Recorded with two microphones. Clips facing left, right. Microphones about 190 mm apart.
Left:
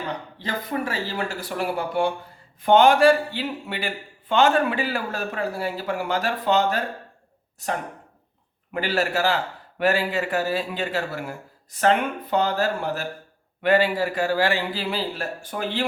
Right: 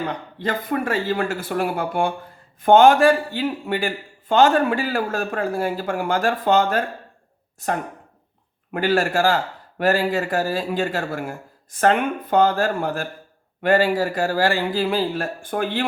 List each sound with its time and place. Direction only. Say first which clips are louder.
0.3 s speech: right 5 dB; 55° right (ahead or behind)
8.7 s speech: right 4 dB; 50° right (ahead or behind)